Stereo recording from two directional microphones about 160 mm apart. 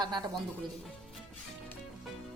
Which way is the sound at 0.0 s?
25° right (ahead or behind).